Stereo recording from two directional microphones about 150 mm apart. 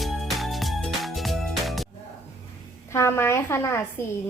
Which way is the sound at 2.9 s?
15° left (ahead or behind).